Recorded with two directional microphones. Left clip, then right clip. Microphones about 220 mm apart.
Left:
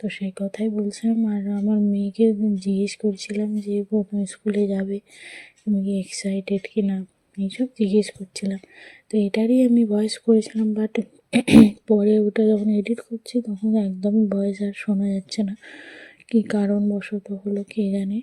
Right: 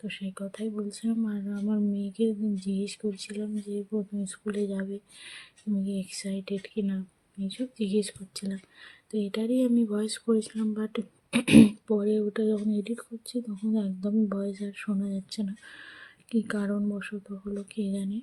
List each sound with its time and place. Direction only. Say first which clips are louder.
0.0 s speech: left 8 dB; 25° left (ahead or behind)
11.9 s speech: left 8 dB; 25° left (ahead or behind)